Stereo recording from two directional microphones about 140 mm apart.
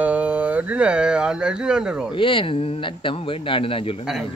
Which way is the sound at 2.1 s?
40° left (ahead or behind).